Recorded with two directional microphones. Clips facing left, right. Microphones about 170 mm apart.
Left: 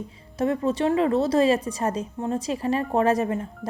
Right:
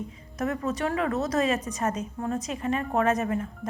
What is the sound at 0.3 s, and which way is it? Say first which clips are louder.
Speech: left 5 dB; 30° left (ahead or behind).